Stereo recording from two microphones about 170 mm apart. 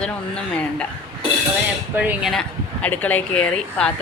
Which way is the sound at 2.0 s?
10° right (ahead or behind).